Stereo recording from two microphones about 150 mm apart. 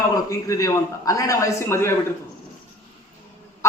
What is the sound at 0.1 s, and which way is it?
A man's voice, 20° left (ahead or behind).